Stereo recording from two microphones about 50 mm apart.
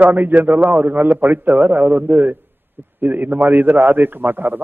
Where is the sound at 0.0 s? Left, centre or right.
Right.